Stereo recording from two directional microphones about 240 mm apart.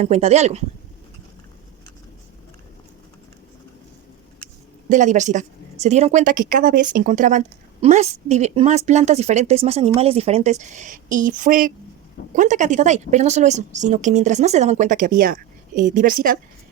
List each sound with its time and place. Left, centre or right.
0.0 s speech: right
4.9 s a woman's voice: right